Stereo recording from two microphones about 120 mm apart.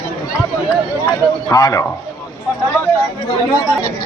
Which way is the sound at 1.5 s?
30° left (ahead or behind).